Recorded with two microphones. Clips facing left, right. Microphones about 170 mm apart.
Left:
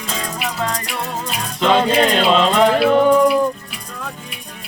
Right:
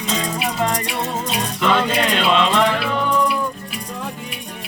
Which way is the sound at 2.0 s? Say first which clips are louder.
Left 3 dB; 35° left (ahead or behind).